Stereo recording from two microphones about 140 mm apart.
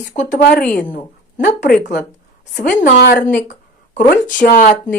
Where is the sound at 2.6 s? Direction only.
70° left (ahead or behind).